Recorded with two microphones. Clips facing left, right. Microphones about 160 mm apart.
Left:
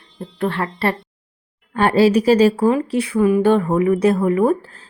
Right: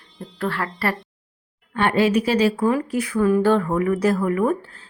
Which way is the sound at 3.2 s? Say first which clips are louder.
Left 3 dB; 20° left (ahead or behind).